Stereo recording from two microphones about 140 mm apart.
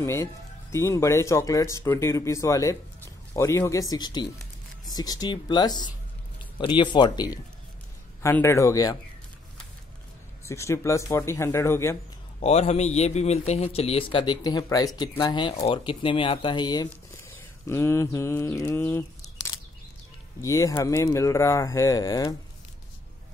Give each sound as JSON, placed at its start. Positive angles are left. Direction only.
{"t": 0.0, "sound": "speech", "side_deg": 20}
{"t": 8.2, "sound": "speech", "side_deg": 15}
{"t": 10.4, "sound": "speech", "side_deg": 20}
{"t": 12.4, "sound": "a man's voice", "side_deg": 50}
{"t": 17.2, "sound": "mantra", "side_deg": 20}
{"t": 20.3, "sound": "speech", "side_deg": 25}